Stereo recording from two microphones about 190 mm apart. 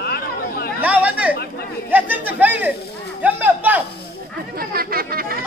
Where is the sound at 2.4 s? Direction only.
10° right (ahead or behind).